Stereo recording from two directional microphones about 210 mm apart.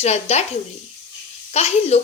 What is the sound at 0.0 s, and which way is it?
Speech, 30° left (ahead or behind).